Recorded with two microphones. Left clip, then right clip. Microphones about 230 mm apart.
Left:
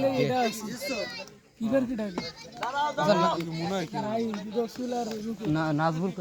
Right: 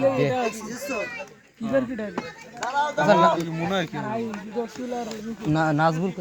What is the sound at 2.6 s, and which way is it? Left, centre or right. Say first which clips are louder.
Speech: right 5 dB; right.